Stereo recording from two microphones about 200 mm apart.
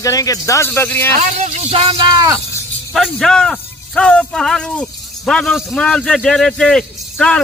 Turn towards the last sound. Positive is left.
turn(degrees=5)  # may be behind; listen again after turning